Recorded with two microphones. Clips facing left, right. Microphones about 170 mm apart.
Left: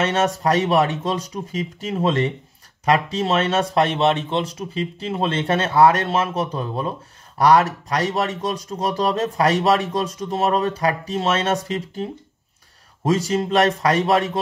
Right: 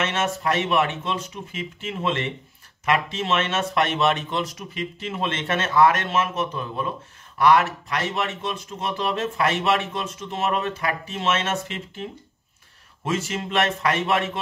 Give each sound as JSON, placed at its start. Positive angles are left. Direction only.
{"t": 0.0, "sound": "speech", "side_deg": 35}